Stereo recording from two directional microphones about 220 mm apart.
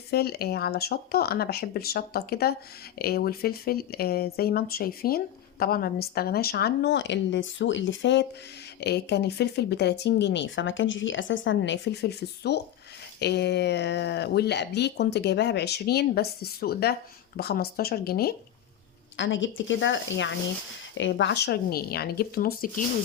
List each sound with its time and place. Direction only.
0.1 s speech: 45° left (ahead or behind)
19.1 s a woman's voice: 55° left (ahead or behind)